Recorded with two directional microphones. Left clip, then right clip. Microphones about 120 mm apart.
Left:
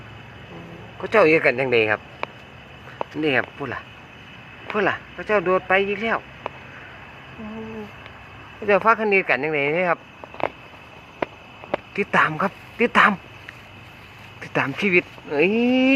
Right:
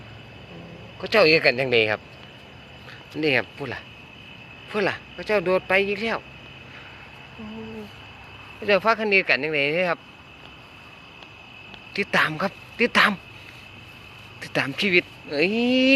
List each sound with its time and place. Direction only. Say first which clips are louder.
1.0 s speech: left 2 dB; 15° right (ahead or behind)
1.3 s speech: left 1 dB; 35° right (ahead or behind)
1.5 s speech: left 2 dB; 25° right (ahead or behind)
3.2 s speech: left 1 dB; 25° right (ahead or behind)
8.6 s speech: left 3 dB; 15° right (ahead or behind)
11.9 s speech: left 2 dB; 10° right (ahead or behind)
14.4 s speech: left 2 dB; 5° right (ahead or behind)